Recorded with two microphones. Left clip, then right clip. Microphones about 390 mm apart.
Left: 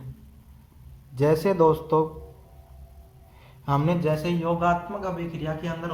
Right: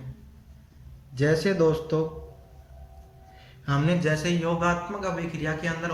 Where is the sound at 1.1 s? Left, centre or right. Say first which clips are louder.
Left 2 dB; centre.